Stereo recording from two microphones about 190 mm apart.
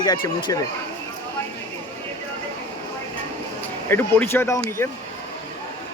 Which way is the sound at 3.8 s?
10° left (ahead or behind).